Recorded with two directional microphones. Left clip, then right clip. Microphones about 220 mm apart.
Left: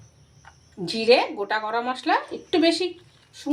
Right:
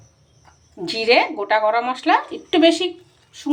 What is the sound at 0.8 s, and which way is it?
A woman's voice, 5° right (ahead or behind).